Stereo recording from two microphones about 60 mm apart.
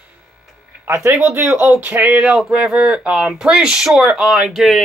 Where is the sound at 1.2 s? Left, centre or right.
Right.